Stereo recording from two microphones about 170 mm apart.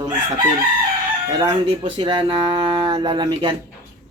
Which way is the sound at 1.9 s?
30° right (ahead or behind).